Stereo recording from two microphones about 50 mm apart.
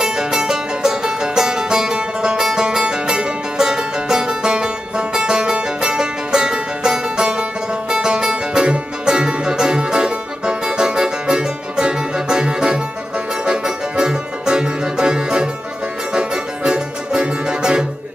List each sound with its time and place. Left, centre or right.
0.0 s music: centre